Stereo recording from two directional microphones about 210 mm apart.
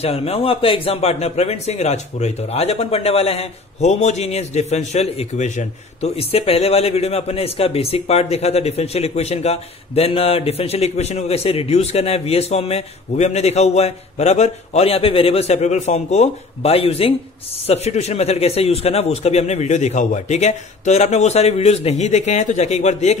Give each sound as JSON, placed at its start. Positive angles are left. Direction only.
{"t": 0.0, "sound": "a man's voice", "side_deg": 30}